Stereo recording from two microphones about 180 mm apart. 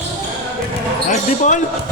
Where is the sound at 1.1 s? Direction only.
45° left (ahead or behind).